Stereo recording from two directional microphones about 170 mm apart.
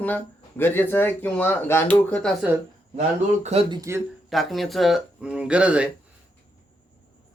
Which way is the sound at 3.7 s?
15° right (ahead or behind).